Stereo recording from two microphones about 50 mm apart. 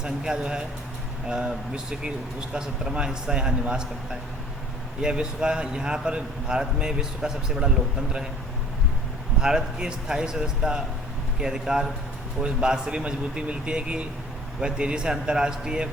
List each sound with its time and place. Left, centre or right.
0.0 s speech: centre
9.4 s speech: centre